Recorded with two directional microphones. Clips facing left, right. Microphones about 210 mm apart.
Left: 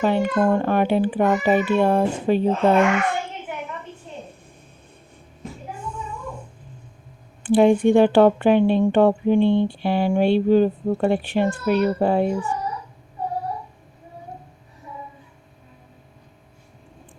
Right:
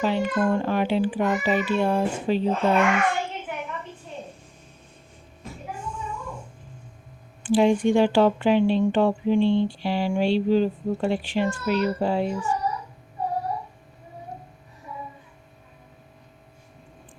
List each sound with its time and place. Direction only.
0.0 s speech: 55° left (ahead or behind)
5.7 s child singing: 60° left (ahead or behind)
7.4 s speech: 55° left (ahead or behind)